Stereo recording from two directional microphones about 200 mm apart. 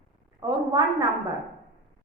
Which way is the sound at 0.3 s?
20° right (ahead or behind).